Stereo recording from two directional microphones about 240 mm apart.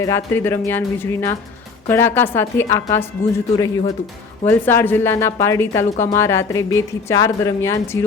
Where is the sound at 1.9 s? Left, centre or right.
Centre.